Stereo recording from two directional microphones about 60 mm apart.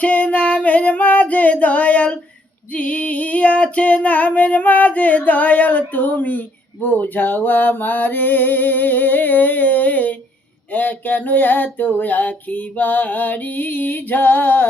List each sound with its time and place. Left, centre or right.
0.0 s singing: left
2.7 s female singing: left
6.8 s music: left